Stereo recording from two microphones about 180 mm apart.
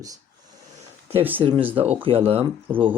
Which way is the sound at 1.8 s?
10° right (ahead or behind).